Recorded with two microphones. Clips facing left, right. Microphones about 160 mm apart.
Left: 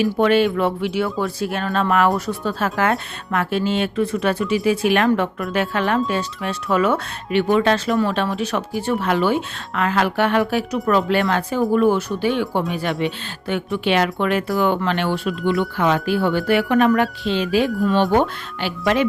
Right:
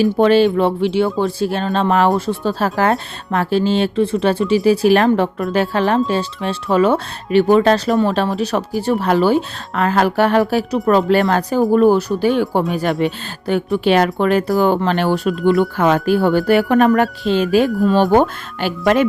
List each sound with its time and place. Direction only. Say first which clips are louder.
0.0 s speech: right 4 dB; 30° right (ahead or behind); by 19.0 s 45° right (ahead or behind)